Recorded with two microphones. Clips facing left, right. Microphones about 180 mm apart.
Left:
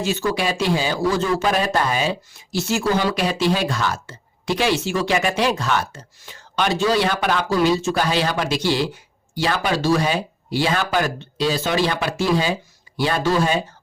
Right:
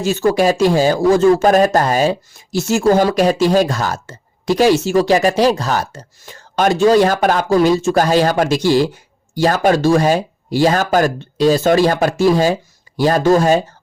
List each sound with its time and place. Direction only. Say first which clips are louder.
0.0 s speech: right 8 dB; 45° right (ahead or behind)